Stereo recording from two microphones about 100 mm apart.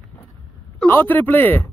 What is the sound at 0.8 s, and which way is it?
Speech, 20° left (ahead or behind).